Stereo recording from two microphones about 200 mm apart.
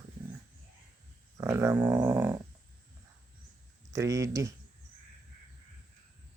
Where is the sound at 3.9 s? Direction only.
15° right (ahead or behind).